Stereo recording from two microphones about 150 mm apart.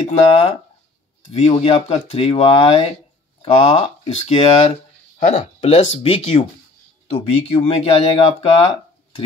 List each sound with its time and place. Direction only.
0.0 s speech: 35° left (ahead or behind)